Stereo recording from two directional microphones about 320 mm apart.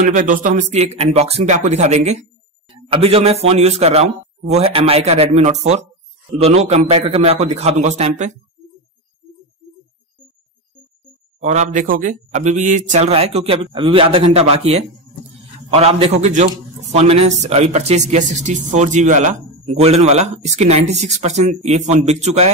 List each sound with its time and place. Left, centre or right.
0.0 s speech: right
11.4 s speech: right